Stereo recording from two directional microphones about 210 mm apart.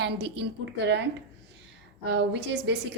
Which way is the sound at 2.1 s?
55° right (ahead or behind).